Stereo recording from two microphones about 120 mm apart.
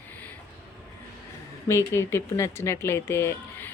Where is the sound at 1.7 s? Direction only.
20° left (ahead or behind).